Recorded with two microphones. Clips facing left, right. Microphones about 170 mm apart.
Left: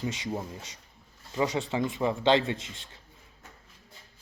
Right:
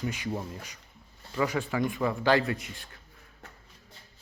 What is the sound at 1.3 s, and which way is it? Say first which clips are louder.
Speech: even; 20° left (ahead or behind).